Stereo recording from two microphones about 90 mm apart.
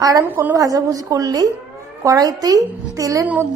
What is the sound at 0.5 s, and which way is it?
A woman's voice, 40° right (ahead or behind).